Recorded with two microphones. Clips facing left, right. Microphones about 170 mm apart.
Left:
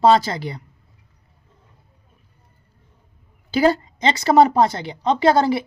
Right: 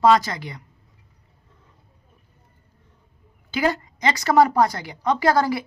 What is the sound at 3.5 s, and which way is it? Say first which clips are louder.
Speech: left 6 dB; 30° left (ahead or behind).